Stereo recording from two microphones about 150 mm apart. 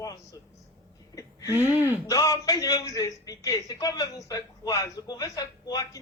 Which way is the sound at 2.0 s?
25° left (ahead or behind).